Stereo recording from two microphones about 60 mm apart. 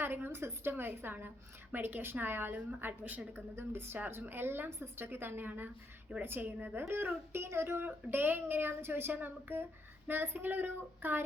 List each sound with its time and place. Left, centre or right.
0.0 s a woman's voice: right